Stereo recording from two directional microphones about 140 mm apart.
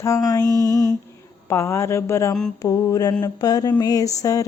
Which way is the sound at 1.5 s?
20° left (ahead or behind).